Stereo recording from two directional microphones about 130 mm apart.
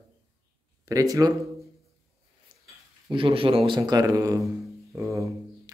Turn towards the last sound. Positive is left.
turn(degrees=-25)  # may be behind; listen again after turning